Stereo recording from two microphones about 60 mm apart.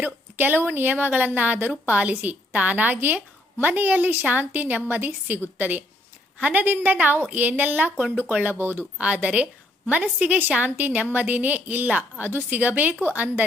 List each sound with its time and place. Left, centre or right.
0.0 s a woman's voice: right
9.0 s a woman's voice: right
12.3 s a woman's voice: right
12.5 s a woman's voice: right